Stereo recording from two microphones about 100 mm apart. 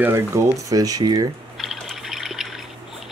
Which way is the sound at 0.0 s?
30° right (ahead or behind).